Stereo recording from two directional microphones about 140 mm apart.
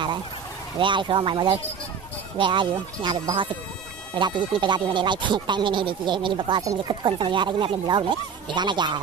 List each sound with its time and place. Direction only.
0.7 s speech: 35° right (ahead or behind)